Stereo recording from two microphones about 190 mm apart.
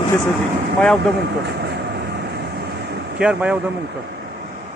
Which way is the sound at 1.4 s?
60° right (ahead or behind).